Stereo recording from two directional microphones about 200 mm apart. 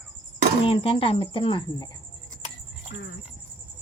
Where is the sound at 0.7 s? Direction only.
30° left (ahead or behind).